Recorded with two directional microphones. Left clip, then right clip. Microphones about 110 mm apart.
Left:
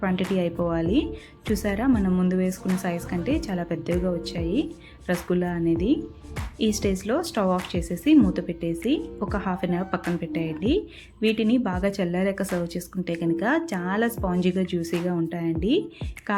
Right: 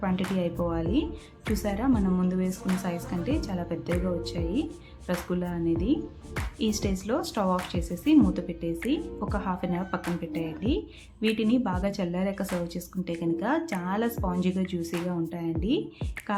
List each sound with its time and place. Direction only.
0.0 s speech: 30° left (ahead or behind)